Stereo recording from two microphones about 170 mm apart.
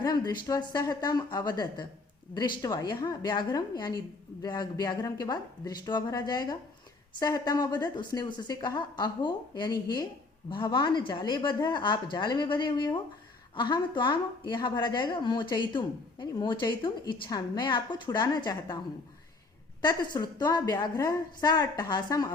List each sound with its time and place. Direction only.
0.0 s speech: 25° left (ahead or behind)
19.8 s speech: 25° left (ahead or behind)